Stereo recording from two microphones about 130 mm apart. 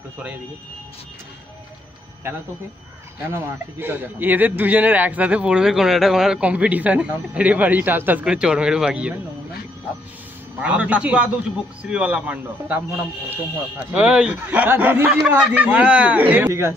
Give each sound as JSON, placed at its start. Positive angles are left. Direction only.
{"t": 3.2, "sound": "speech", "side_deg": -20}
{"t": 10.6, "sound": "speech", "side_deg": -10}